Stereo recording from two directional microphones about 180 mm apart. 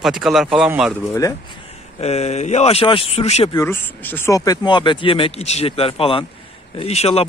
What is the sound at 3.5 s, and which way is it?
A man's voice, 15° left (ahead or behind).